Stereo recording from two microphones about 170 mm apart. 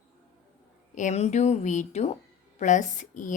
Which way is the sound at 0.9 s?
45° left (ahead or behind).